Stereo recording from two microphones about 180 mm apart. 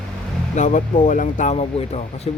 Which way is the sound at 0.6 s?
45° left (ahead or behind).